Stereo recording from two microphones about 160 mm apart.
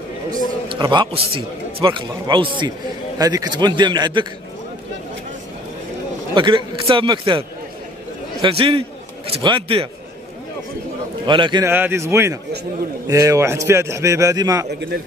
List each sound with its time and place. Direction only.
0.7 s a man's voice: 30° right (ahead or behind)
6.3 s a man's voice: 30° right (ahead or behind)
11.2 s a man's voice: 30° right (ahead or behind)
11.6 s a man's voice: 15° right (ahead or behind)
14.7 s speech: 90° right